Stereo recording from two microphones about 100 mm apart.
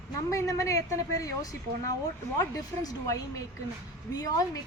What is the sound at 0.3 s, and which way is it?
A woman's voice, 30° left (ahead or behind).